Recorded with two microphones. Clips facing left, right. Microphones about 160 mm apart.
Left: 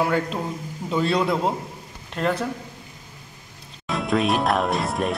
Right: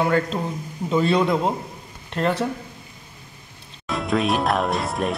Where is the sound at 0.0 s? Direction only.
10° left (ahead or behind).